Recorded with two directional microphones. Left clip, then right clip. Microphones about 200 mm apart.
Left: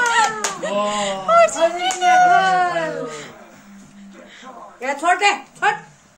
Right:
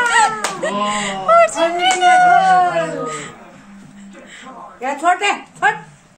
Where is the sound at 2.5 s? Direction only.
25° left (ahead or behind).